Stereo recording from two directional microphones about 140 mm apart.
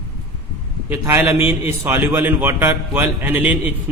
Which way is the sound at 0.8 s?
15° right (ahead or behind).